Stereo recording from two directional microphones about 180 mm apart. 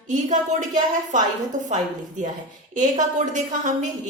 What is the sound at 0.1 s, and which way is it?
A woman's voice, 45° right (ahead or behind).